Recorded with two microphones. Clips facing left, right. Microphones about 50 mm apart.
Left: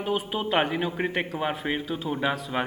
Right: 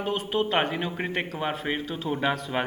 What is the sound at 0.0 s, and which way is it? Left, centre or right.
A man's voice, centre.